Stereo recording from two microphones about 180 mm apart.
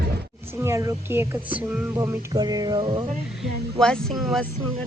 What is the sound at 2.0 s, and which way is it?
Music, 20° right (ahead or behind).